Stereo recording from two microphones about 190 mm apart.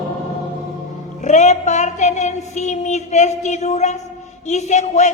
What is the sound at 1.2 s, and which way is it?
A woman's voice, 40° left (ahead or behind).